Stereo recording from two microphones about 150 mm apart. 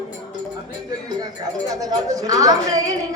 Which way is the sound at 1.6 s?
25° right (ahead or behind).